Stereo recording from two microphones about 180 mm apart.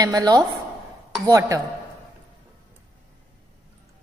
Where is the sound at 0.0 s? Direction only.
20° right (ahead or behind).